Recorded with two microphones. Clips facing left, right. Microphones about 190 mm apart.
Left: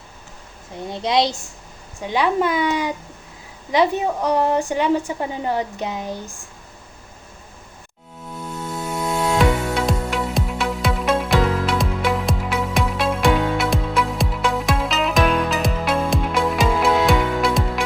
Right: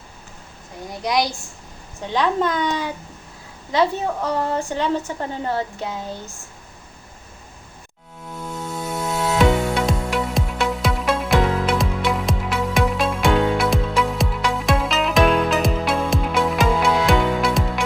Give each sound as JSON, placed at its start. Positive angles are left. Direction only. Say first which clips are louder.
{"t": 0.9, "sound": "a child's voice", "louder": "left 2 dB", "side_deg": 25}
{"t": 2.0, "sound": "a woman's voice", "louder": "left 1 dB", "side_deg": 10}
{"t": 9.4, "sound": "music", "louder": "right 5 dB", "side_deg": 0}